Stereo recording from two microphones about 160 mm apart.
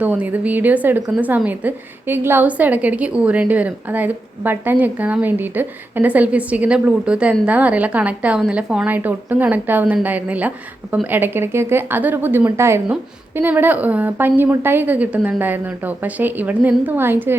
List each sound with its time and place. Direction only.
0.0 s speech: 10° right (ahead or behind)